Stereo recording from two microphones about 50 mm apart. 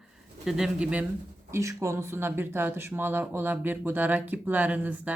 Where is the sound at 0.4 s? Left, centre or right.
Centre.